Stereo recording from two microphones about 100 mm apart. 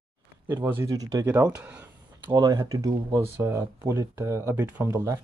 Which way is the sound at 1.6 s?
15° right (ahead or behind).